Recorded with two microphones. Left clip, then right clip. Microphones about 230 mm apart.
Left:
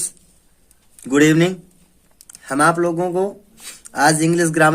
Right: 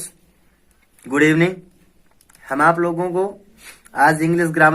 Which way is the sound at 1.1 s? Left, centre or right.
Left.